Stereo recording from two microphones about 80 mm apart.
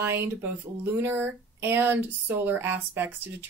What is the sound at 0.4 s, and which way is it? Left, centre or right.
Speech, right.